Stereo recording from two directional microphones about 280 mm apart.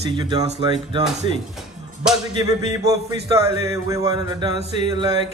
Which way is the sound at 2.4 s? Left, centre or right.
Centre.